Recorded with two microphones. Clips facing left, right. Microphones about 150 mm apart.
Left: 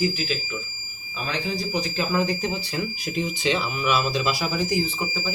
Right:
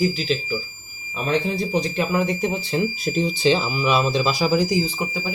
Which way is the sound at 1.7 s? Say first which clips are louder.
Right 3 dB; 25° right (ahead or behind).